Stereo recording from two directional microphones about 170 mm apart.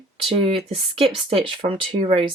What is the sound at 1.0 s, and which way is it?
Speech, 35° right (ahead or behind).